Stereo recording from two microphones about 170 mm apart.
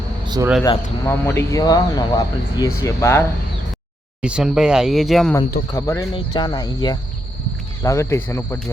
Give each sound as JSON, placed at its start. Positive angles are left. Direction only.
{"t": 0.6, "sound": "speech", "side_deg": 20}
{"t": 4.2, "sound": "speech", "side_deg": -5}
{"t": 5.7, "sound": "speech", "side_deg": 15}